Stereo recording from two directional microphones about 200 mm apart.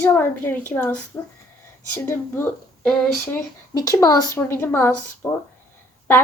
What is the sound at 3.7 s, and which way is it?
A woman's voice, 20° left (ahead or behind).